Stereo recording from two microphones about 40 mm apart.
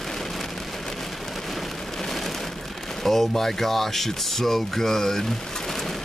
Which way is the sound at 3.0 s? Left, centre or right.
Centre.